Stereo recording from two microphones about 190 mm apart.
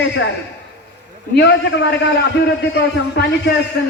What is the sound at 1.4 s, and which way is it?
A man's voice, 65° left (ahead or behind).